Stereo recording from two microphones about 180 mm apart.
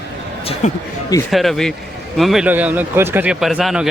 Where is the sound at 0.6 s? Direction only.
40° left (ahead or behind).